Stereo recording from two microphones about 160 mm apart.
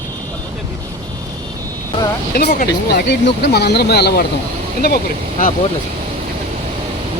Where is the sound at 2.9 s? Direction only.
90° left.